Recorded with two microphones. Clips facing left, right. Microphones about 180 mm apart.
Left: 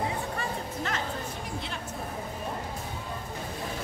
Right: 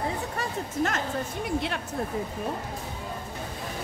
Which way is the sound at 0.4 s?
45° right (ahead or behind).